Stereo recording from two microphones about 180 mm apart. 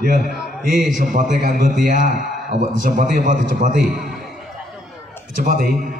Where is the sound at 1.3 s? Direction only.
50° right (ahead or behind).